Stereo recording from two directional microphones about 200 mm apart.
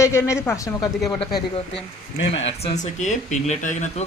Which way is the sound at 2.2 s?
65° left (ahead or behind).